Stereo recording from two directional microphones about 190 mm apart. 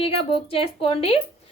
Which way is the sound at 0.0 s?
30° left (ahead or behind).